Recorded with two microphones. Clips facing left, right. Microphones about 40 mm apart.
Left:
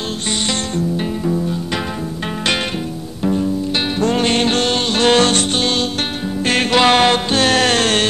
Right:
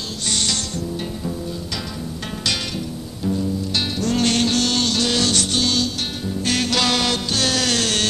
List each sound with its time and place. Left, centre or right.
0.5 s music: left
3.7 s music: left
5.0 s music: left